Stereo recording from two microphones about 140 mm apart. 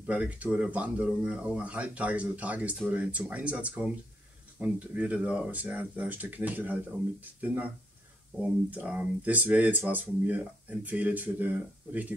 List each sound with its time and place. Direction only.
0.0 s speech: 10° right (ahead or behind)